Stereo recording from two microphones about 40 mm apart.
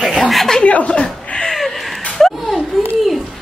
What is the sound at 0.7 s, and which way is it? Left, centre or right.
Chuckle, left.